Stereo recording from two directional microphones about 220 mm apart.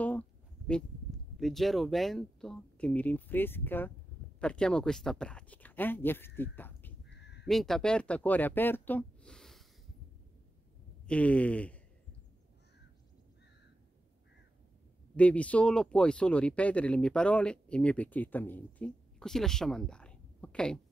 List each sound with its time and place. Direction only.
1.3 s speech: centre (ahead or behind)
7.1 s crow: 50° left (ahead or behind)
7.4 s speech: centre (ahead or behind)
11.1 s speech: 5° left (ahead or behind)
15.1 s speech: 5° left (ahead or behind)